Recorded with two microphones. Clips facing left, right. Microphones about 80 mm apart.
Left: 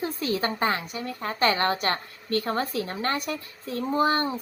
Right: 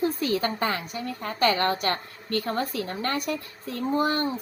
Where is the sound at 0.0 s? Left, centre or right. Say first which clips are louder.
Right 2 dB; left.